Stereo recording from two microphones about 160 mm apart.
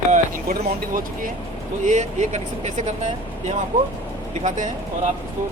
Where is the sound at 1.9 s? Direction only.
45° right (ahead or behind).